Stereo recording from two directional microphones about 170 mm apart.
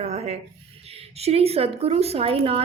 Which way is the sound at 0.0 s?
35° right (ahead or behind).